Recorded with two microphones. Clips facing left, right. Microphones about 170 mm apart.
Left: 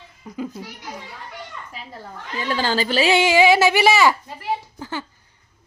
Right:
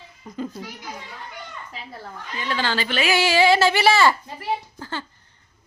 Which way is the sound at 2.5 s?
40° left (ahead or behind).